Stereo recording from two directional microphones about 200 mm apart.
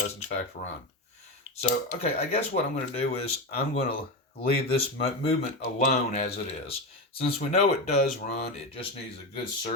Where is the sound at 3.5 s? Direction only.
30° left (ahead or behind).